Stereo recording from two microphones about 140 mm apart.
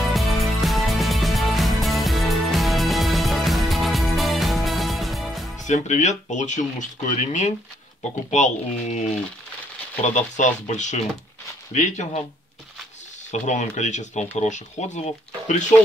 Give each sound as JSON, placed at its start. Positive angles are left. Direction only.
{"t": 0.1, "sound": "music", "side_deg": 0}
{"t": 5.6, "sound": "speech", "side_deg": 60}
{"t": 10.0, "sound": "speech", "side_deg": 60}
{"t": 13.3, "sound": "speech", "side_deg": 55}